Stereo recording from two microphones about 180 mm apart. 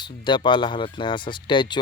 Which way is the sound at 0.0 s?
25° left (ahead or behind).